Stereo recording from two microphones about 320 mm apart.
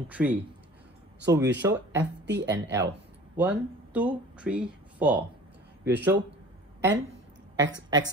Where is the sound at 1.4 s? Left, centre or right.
Right.